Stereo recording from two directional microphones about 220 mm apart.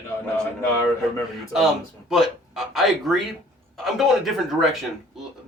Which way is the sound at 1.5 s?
Centre (ahead or behind).